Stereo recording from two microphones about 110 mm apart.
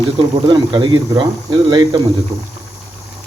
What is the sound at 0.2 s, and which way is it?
Speech, 45° right (ahead or behind).